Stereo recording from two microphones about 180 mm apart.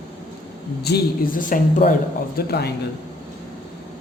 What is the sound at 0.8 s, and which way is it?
Speech, 55° left (ahead or behind).